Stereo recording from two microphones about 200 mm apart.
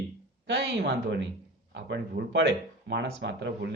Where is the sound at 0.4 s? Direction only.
60° right (ahead or behind).